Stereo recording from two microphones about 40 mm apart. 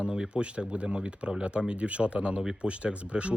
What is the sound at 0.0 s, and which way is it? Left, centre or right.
Speech, right.